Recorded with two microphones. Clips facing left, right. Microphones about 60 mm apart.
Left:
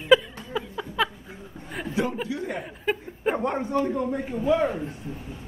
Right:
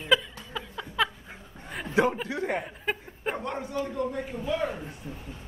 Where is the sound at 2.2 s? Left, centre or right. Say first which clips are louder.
Right 1 dB; right.